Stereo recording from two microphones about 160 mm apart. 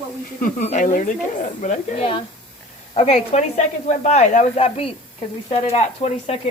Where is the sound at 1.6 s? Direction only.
45° left (ahead or behind).